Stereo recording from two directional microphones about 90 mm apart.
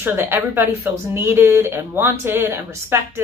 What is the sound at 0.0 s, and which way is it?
Speech, 25° right (ahead or behind).